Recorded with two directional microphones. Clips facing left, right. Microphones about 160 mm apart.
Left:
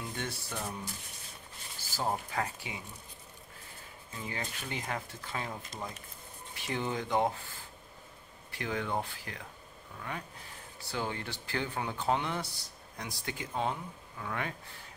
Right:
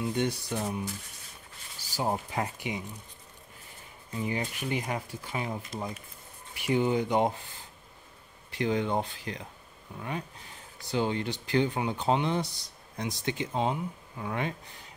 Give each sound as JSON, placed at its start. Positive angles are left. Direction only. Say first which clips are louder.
{"t": 0.1, "sound": "speech", "louder": "right 9 dB", "side_deg": -20}
{"t": 2.0, "sound": "speech", "louder": "right 3 dB", "side_deg": -15}
{"t": 4.2, "sound": "speech", "louder": "right 8 dB", "side_deg": -15}
{"t": 8.5, "sound": "speech", "louder": "right 7 dB", "side_deg": -20}
{"t": 10.9, "sound": "speech", "louder": "right 7 dB", "side_deg": -20}